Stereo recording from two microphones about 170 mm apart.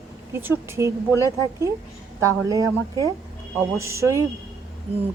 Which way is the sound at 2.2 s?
20° right (ahead or behind).